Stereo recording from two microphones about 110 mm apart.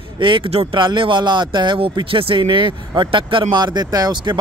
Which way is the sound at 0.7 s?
45° right (ahead or behind).